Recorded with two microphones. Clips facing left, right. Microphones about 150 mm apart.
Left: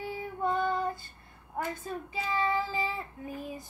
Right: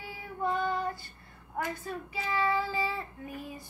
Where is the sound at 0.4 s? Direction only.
20° left (ahead or behind).